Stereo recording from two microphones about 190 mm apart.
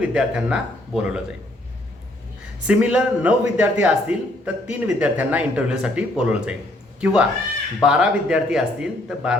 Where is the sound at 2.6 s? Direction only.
5° right (ahead or behind).